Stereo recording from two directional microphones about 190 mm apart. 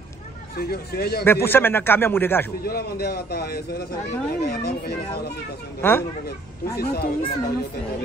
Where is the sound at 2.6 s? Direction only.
55° left (ahead or behind).